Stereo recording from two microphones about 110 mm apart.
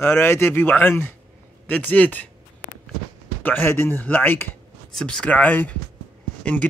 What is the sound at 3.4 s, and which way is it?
Speech, 20° left (ahead or behind).